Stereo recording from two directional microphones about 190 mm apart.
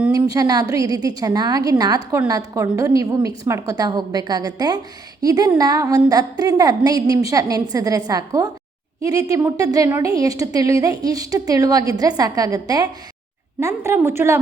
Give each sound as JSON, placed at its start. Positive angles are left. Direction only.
{"t": 0.1, "sound": "a woman's voice", "side_deg": -20}